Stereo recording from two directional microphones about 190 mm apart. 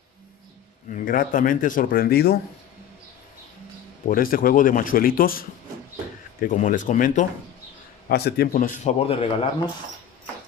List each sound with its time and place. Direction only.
0.8 s speech: 45° left (ahead or behind)
4.1 s speech: 50° left (ahead or behind)
8.1 s speech: 55° left (ahead or behind); by 9.5 s 30° left (ahead or behind)